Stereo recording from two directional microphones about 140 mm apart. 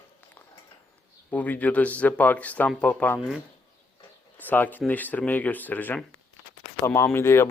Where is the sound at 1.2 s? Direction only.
10° left (ahead or behind).